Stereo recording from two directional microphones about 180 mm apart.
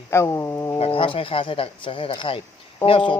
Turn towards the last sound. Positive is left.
turn(degrees=30)  # may be behind; listen again after turning